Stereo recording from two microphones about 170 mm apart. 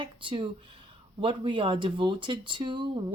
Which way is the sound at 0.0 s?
30° right (ahead or behind).